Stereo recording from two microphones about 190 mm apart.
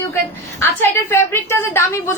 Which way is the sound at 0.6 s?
10° left (ahead or behind).